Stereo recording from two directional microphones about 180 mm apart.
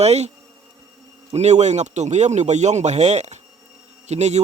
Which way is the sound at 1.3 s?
40° right (ahead or behind).